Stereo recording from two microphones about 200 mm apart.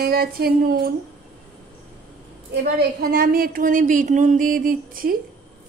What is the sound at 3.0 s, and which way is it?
A woman's voice, 50° right (ahead or behind).